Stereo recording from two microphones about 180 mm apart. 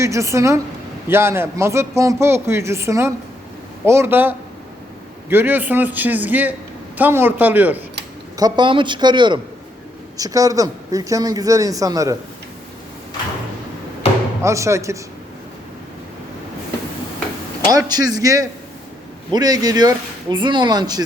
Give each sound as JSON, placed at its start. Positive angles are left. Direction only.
{"t": 0.0, "sound": "a man's voice", "side_deg": -15}
{"t": 8.4, "sound": "speech", "side_deg": -25}
{"t": 14.4, "sound": "a man's voice", "side_deg": -15}
{"t": 17.7, "sound": "speech", "side_deg": -20}